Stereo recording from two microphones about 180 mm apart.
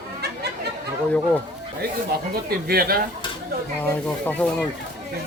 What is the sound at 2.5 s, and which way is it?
Speech, 55° right (ahead or behind).